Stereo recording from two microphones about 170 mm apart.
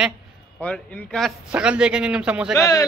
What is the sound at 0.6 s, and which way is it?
Speech, 5° left (ahead or behind).